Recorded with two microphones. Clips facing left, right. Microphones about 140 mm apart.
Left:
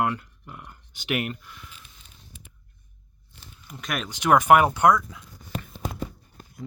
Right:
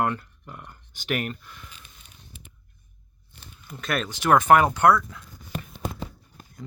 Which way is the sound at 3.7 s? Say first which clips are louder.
Right 3 dB; 15° left (ahead or behind).